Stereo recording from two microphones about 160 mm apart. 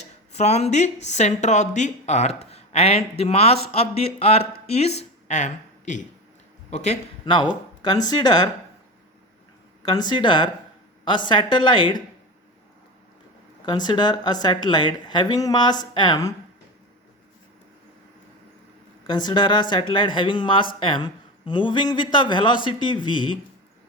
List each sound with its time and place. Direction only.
0.0 s a sound: 45° left (ahead or behind)
1.0 s a woman's voice: 45° left (ahead or behind)
7.3 s speech: 30° left (ahead or behind)
9.8 s speech: 25° left (ahead or behind)
13.7 s speech: 30° left (ahead or behind)
19.0 s speech: 25° left (ahead or behind)